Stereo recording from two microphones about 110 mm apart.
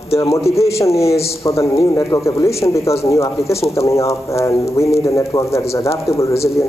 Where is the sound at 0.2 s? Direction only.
25° left (ahead or behind).